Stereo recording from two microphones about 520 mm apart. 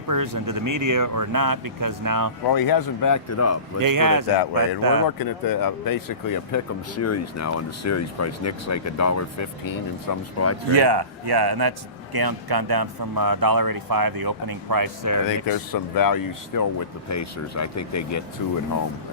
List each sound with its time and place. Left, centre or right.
0.1 s speech: right
2.5 s speech: left
3.8 s speech: right
5.0 s speech: left
10.8 s speech: right
15.4 s speech: left